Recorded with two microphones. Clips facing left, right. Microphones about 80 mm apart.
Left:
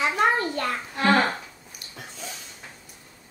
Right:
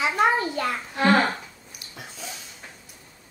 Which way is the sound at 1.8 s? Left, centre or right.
Centre.